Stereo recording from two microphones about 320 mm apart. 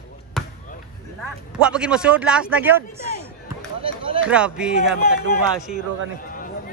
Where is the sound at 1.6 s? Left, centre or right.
Centre.